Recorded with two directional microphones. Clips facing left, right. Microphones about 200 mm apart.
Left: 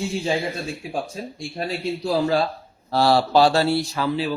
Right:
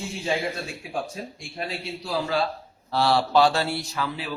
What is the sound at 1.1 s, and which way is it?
Speech, 35° left (ahead or behind).